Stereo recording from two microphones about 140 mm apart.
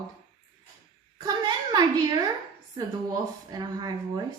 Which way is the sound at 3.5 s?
30° right (ahead or behind).